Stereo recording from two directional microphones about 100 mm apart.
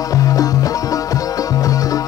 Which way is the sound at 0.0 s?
35° left (ahead or behind).